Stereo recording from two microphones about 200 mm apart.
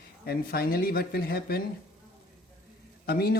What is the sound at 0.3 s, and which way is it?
Speech, 50° left (ahead or behind).